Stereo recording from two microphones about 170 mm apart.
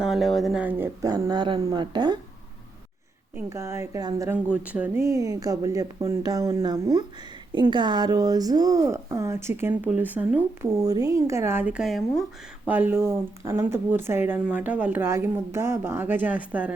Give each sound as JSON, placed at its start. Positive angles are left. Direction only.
{"t": 0.0, "sound": "speech", "side_deg": 0}
{"t": 1.1, "sound": "speech", "side_deg": -25}
{"t": 3.3, "sound": "speech", "side_deg": -15}
{"t": 4.4, "sound": "speech", "side_deg": -10}